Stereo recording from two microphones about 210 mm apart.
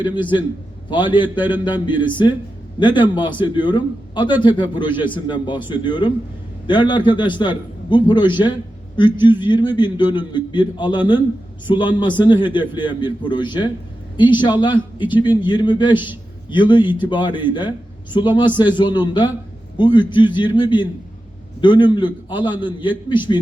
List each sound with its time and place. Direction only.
0.0 s a man's voice: 20° left (ahead or behind)